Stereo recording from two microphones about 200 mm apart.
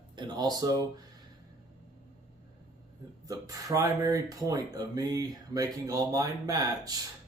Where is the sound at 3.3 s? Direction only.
15° right (ahead or behind).